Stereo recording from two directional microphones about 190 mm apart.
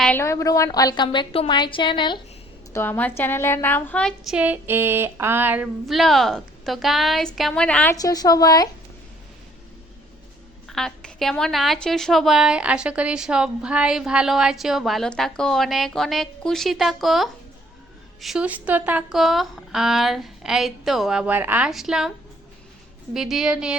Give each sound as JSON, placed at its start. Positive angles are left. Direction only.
{"t": 0.0, "sound": "a woman's voice", "side_deg": 10}
{"t": 2.7, "sound": "a woman's voice", "side_deg": 10}
{"t": 5.8, "sound": "a woman's voice", "side_deg": 0}
{"t": 7.9, "sound": "a woman's voice", "side_deg": 20}
{"t": 10.7, "sound": "a woman's voice", "side_deg": 0}
{"t": 23.1, "sound": "a woman's voice", "side_deg": 0}